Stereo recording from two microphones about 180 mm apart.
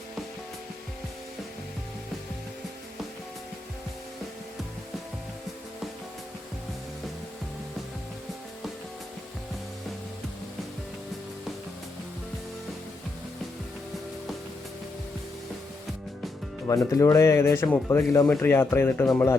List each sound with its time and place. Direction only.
16.6 s speech: 15° left (ahead or behind)